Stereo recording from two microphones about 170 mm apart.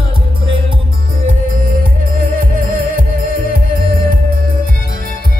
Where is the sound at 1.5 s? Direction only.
55° right (ahead or behind).